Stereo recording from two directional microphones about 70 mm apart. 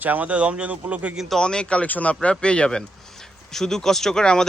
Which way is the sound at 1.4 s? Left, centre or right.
Centre.